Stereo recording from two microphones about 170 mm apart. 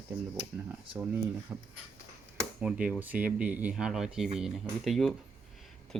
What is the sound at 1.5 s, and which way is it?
Speech, 10° right (ahead or behind).